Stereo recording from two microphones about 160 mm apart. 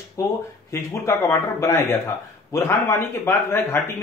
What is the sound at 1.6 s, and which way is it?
Speech, 15° left (ahead or behind).